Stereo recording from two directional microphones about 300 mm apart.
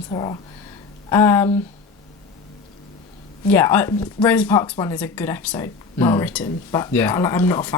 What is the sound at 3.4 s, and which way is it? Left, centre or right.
Speech, centre.